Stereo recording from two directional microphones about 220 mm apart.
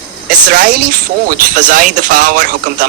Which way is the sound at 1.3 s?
40° right (ahead or behind).